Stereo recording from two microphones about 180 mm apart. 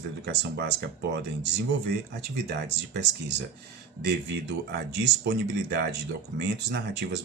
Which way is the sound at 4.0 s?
70° right (ahead or behind).